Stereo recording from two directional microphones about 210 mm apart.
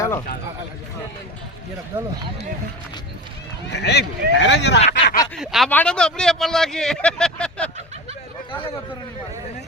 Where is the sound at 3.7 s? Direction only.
50° left (ahead or behind).